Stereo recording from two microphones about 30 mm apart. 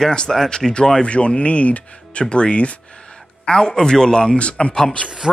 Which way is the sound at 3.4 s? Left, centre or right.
Left.